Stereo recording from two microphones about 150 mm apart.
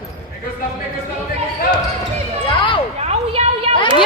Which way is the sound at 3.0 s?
45° right (ahead or behind).